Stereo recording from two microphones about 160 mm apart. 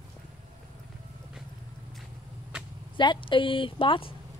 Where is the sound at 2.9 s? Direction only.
30° left (ahead or behind).